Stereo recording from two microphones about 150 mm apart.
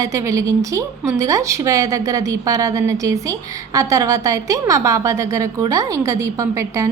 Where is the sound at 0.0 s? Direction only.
20° right (ahead or behind).